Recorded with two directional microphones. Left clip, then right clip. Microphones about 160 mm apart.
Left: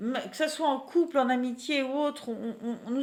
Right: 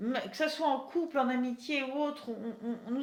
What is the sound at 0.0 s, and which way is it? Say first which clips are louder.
A woman's voice: left 2 dB; 30° left (ahead or behind).